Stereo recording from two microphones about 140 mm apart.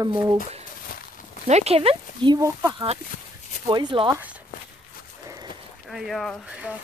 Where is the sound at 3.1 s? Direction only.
60° left (ahead or behind).